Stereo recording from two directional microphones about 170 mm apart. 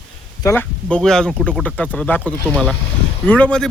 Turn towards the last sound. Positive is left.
turn(degrees=5)  # may be behind; listen again after turning